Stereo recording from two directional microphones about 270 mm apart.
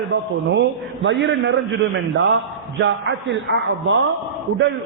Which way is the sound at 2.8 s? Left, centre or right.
Right.